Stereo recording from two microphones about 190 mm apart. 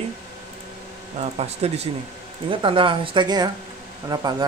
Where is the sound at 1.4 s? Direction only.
35° right (ahead or behind).